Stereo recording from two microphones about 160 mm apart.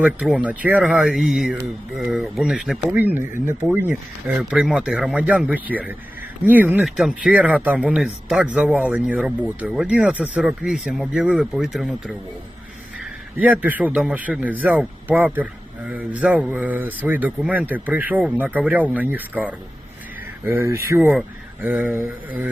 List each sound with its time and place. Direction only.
0.0 s a man's voice: 10° right (ahead or behind)
4.4 s a man's voice: 5° right (ahead or behind)